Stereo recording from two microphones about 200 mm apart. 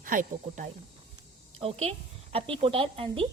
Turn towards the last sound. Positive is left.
turn(degrees=-25)  # may be behind; listen again after turning